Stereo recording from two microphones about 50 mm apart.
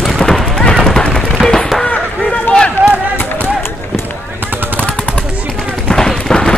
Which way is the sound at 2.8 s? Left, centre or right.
Centre.